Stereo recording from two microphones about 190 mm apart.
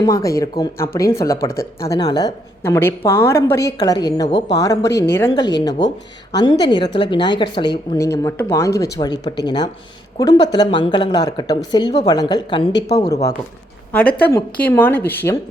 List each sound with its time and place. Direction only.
0.0 s a woman's voice: 15° left (ahead or behind)